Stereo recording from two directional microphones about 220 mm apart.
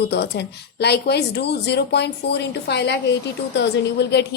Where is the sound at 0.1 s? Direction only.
50° left (ahead or behind).